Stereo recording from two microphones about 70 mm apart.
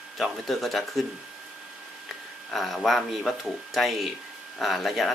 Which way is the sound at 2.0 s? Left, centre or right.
Centre.